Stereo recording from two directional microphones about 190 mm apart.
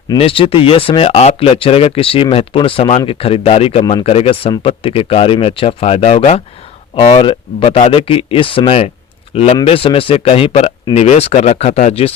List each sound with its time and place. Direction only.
0.2 s a man's voice: 30° left (ahead or behind)